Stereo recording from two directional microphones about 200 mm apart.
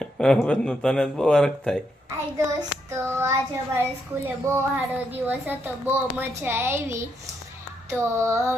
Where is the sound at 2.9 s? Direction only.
10° right (ahead or behind).